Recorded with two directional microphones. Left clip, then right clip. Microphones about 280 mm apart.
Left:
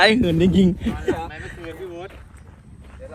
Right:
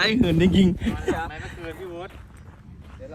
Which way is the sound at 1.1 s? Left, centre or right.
Centre.